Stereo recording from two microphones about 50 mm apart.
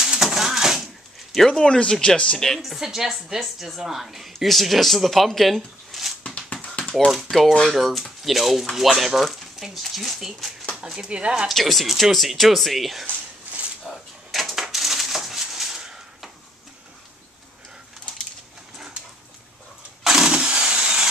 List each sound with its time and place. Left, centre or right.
0.0 s a sound: centre
1.3 s speech: centre
1.6 s speech: centre
2.3 s speech: centre
6.2 s tap: left
7.6 s speech: centre
10.8 s speech: centre
11.4 s speech: centre
13.9 s drawer open or close: centre
14.3 s a sound: centre
20.0 s engine starting: centre